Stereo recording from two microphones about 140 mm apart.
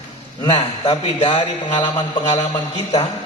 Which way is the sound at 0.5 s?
30° left (ahead or behind).